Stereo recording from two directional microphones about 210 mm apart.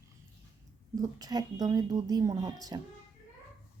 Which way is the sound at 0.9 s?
15° right (ahead or behind).